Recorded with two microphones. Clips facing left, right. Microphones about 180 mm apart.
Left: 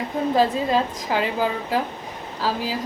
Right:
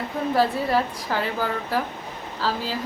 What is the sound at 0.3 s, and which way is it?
A woman's voice, 15° left (ahead or behind).